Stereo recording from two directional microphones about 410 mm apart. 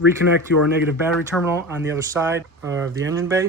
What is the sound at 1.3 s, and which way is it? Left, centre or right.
Speech, centre.